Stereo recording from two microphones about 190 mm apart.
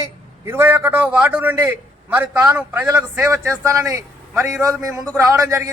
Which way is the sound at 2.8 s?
20° right (ahead or behind).